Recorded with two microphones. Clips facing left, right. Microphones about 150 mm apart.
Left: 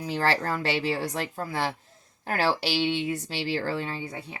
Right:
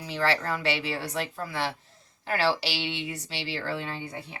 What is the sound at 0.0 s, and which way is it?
A woman's voice, 45° left (ahead or behind).